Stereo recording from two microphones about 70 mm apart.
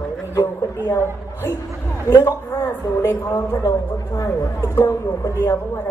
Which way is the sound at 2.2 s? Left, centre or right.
Left.